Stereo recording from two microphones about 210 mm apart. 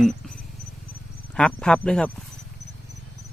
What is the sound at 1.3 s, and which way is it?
Speech, 5° left (ahead or behind).